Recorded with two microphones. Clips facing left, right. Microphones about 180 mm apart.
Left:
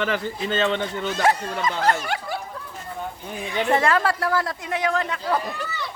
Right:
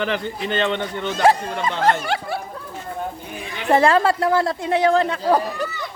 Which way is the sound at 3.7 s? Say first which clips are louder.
Right 6 dB; 30° right (ahead or behind).